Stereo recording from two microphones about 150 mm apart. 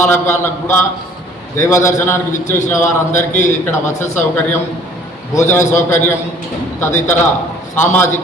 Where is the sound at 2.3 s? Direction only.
55° left (ahead or behind).